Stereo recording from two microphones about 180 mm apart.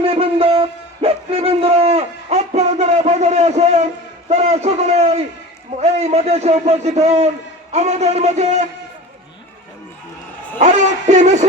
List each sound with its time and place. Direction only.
0.0 s a sound: 30° right (ahead or behind)
4.3 s a man's voice: 40° right (ahead or behind)
10.6 s a man's voice: 40° right (ahead or behind)